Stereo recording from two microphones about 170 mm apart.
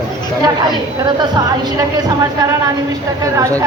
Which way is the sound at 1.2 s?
25° right (ahead or behind).